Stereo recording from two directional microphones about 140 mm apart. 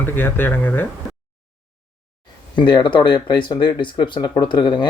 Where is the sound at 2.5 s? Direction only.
35° left (ahead or behind).